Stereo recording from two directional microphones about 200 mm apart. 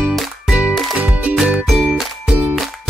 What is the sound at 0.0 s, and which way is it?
Music, 5° right (ahead or behind).